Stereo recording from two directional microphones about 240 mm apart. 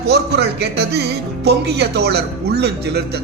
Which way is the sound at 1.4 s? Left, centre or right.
Right.